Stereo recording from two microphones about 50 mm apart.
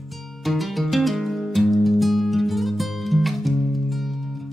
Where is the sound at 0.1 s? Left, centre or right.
Centre.